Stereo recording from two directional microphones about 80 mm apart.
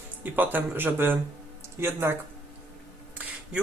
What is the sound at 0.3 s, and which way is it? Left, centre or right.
Speech, right.